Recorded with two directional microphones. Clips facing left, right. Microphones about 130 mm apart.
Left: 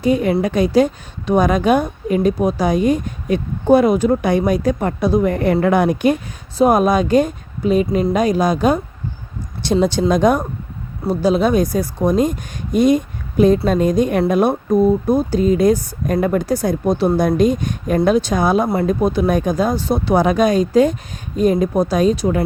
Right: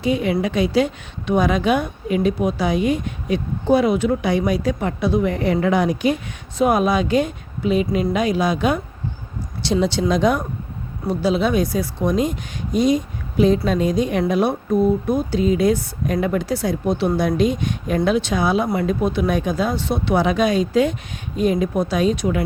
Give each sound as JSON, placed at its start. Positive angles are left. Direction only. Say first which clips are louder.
{"t": 0.0, "sound": "a woman's voice", "louder": "left 4 dB", "side_deg": 45}
{"t": 9.8, "sound": "a woman's voice", "louder": "left 4 dB", "side_deg": 50}